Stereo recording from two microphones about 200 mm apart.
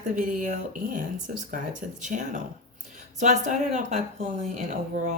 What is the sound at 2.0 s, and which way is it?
Speech, 40° right (ahead or behind).